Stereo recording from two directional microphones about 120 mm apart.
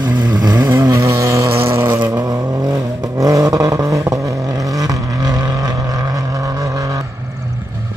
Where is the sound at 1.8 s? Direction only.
40° right (ahead or behind).